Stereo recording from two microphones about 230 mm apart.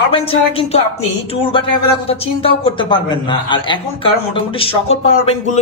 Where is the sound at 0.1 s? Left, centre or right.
Left.